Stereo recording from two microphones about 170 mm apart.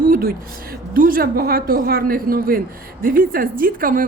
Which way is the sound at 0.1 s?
60° right (ahead or behind).